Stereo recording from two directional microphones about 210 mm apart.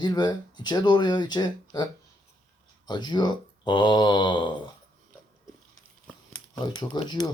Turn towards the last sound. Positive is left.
turn(degrees=20)  # may be behind; listen again after turning